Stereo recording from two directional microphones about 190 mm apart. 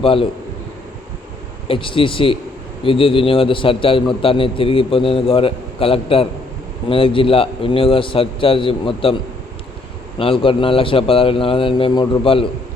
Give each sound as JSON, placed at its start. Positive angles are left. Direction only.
{"t": 0.0, "sound": "a man's voice", "side_deg": 30}
{"t": 1.6, "sound": "a man's voice", "side_deg": 30}
{"t": 10.2, "sound": "a man's voice", "side_deg": 30}